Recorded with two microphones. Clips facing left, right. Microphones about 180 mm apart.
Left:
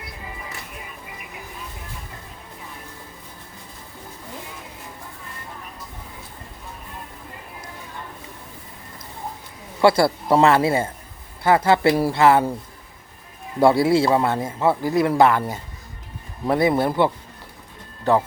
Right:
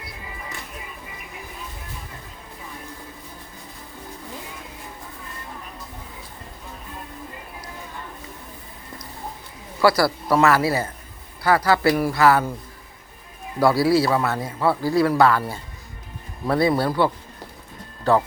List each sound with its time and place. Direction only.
9.8 s speech: 25° left (ahead or behind)
13.6 s speech: 25° left (ahead or behind)